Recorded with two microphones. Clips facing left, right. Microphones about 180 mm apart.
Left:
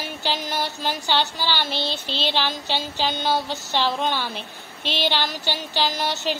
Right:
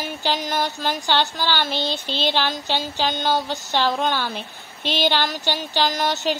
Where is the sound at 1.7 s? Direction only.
45° right (ahead or behind).